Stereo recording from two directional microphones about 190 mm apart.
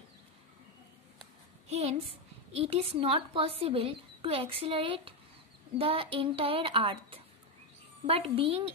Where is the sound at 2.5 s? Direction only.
30° right (ahead or behind).